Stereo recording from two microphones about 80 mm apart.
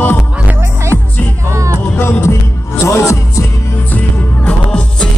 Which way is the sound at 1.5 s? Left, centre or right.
Right.